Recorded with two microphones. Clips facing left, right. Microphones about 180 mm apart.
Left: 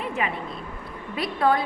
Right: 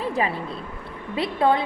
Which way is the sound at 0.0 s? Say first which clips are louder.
Right 3 dB; 35° right (ahead or behind).